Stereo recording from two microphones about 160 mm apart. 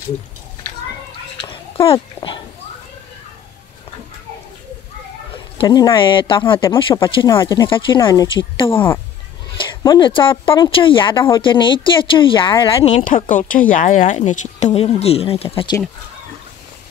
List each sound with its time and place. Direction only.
1.4 s a sound: 35° left (ahead or behind)
5.6 s speech: 30° left (ahead or behind)
13.0 s speech: 55° left (ahead or behind); by 15.8 s 30° left (ahead or behind)